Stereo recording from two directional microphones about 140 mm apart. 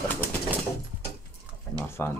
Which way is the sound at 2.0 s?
15° left (ahead or behind).